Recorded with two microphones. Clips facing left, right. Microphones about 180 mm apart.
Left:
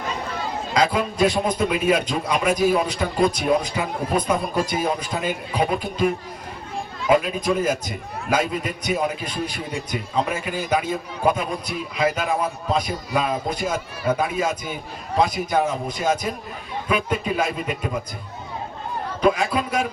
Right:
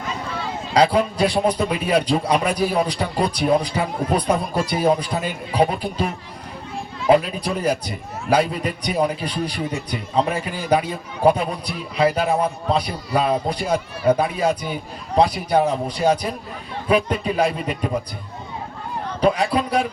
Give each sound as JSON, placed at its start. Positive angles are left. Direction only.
{"t": 0.7, "sound": "a man's voice", "side_deg": -35}
{"t": 7.1, "sound": "a man's voice", "side_deg": -35}
{"t": 19.2, "sound": "a man's voice", "side_deg": -35}